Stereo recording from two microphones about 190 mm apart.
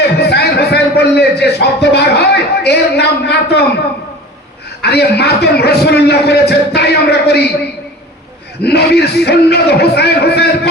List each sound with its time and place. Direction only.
0.2 s a man's voice: 60° left (ahead or behind)
4.8 s a man's voice: 60° left (ahead or behind)
8.6 s a man's voice: 60° left (ahead or behind)